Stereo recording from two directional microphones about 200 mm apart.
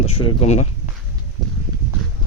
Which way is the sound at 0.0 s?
30° left (ahead or behind).